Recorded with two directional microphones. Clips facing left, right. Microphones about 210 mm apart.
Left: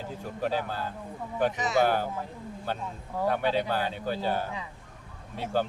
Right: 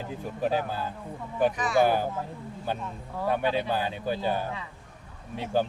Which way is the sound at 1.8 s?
10° right (ahead or behind).